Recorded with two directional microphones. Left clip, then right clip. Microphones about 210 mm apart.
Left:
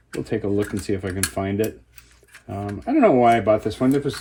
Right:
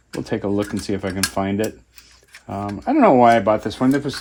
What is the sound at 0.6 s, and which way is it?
Speech, 5° right (ahead or behind).